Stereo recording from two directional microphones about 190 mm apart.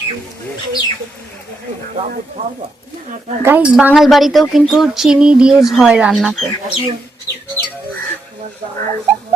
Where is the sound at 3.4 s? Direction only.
10° right (ahead or behind).